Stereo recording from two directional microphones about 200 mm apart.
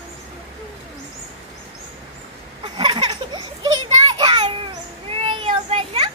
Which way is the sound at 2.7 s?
20° right (ahead or behind).